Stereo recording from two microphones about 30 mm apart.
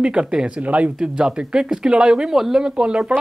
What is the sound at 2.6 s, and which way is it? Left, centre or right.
Speech, right.